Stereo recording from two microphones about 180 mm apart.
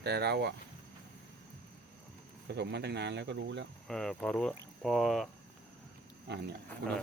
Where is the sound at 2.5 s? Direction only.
70° right (ahead or behind).